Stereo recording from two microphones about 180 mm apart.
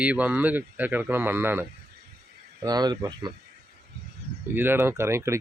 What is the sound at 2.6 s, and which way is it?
Speech, 20° right (ahead or behind).